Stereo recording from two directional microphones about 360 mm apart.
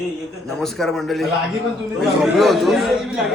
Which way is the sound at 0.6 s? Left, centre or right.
Centre.